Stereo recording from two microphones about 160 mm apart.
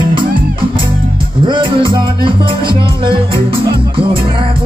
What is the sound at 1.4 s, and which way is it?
Music, 30° right (ahead or behind).